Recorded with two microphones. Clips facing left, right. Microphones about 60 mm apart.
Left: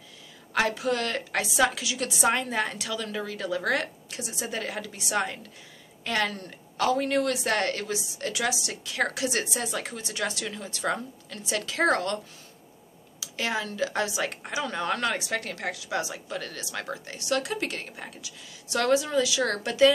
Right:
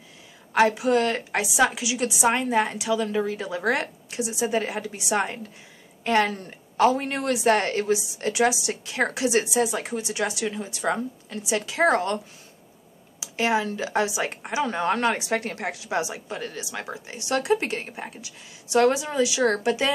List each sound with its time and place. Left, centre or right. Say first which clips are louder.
0.5 s speech: right 6 dB; right
13.2 s speech: right 6 dB; right